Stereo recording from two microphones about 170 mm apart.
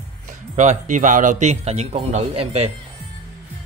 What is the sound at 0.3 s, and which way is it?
Speech, 45° right (ahead or behind).